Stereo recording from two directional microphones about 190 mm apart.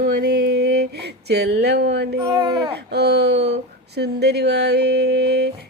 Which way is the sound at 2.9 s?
60° right (ahead or behind).